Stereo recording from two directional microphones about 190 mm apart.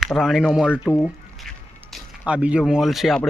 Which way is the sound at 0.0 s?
Centre (ahead or behind).